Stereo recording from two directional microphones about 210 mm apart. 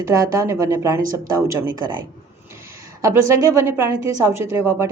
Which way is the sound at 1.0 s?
40° right (ahead or behind).